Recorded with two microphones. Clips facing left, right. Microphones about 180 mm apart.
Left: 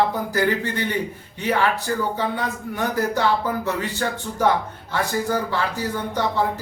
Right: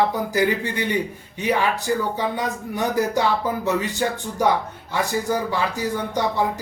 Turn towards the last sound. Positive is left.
turn(degrees=-15)  # may be behind; listen again after turning